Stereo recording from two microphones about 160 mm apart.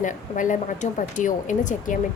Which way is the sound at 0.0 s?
55° left (ahead or behind).